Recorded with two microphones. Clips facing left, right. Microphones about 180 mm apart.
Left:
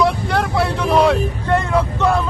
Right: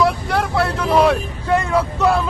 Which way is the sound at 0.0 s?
Centre (ahead or behind).